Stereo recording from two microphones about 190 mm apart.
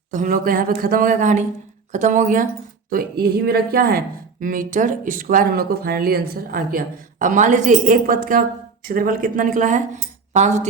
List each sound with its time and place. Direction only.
0.1 s speech: 45° right (ahead or behind)
2.9 s speech: 55° right (ahead or behind); by 10.7 s 40° right (ahead or behind)